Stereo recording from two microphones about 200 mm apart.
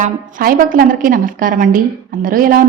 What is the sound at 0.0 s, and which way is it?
A woman's voice, 45° right (ahead or behind).